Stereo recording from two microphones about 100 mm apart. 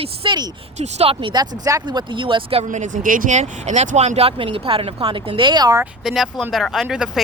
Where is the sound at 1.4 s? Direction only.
40° right (ahead or behind); by 2.6 s 65° right (ahead or behind).